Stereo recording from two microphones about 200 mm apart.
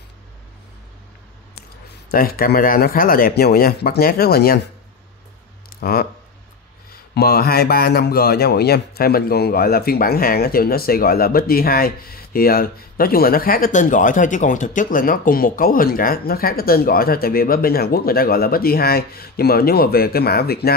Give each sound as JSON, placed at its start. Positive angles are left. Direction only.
{"t": 2.0, "sound": "a man's voice", "side_deg": 45}
{"t": 5.7, "sound": "a sound", "side_deg": 50}
{"t": 7.2, "sound": "a man's voice", "side_deg": 50}